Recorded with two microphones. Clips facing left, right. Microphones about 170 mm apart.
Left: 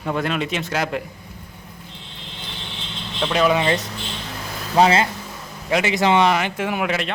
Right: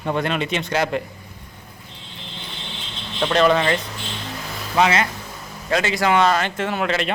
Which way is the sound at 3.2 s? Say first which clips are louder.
Right 2 dB; 5° left (ahead or behind).